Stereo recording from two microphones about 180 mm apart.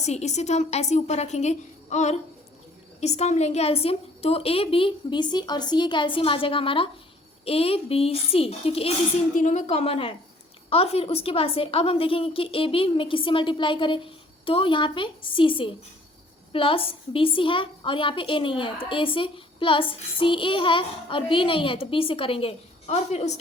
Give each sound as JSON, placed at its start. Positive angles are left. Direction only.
{"t": 0.0, "sound": "a woman's voice", "side_deg": 40}